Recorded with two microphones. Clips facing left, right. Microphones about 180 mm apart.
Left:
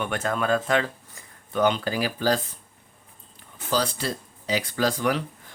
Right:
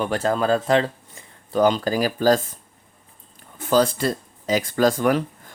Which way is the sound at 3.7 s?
50° right (ahead or behind).